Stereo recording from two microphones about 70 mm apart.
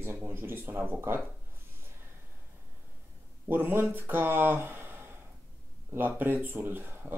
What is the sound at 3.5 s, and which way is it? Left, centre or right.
Speech, right.